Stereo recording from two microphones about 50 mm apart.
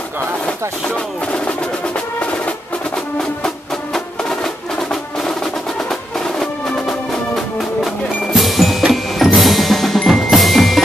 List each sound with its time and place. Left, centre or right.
0.5 s speech: left
2.1 s music: left
3.4 s music: centre
8.9 s tubular bells: centre